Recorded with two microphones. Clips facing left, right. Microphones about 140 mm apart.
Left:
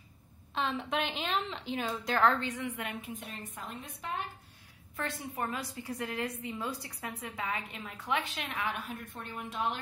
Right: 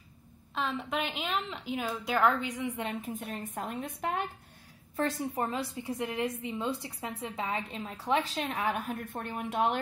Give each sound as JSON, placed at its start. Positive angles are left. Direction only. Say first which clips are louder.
{"t": 0.6, "sound": "a woman's voice", "louder": "even", "side_deg": 0}
{"t": 3.0, "sound": "a woman's voice", "louder": "right 5 dB", "side_deg": -50}
{"t": 4.9, "sound": "a woman's voice", "louder": "right 6 dB", "side_deg": -35}